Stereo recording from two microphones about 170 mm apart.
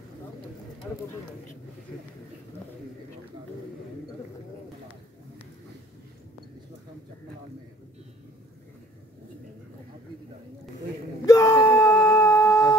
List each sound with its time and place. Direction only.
11.2 s wail: 20° left (ahead or behind)